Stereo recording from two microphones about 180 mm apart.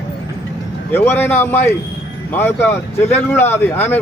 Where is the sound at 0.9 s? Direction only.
10° left (ahead or behind).